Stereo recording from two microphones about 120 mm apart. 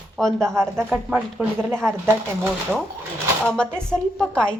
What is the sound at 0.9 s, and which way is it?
Speech, 10° right (ahead or behind).